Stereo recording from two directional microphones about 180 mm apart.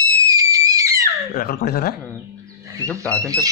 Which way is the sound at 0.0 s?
20° right (ahead or behind).